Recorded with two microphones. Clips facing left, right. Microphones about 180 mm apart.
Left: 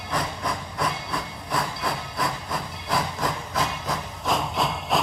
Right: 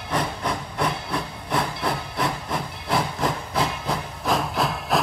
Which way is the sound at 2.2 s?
Centre (ahead or behind).